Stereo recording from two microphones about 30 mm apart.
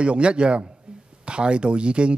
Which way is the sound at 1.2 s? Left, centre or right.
Right.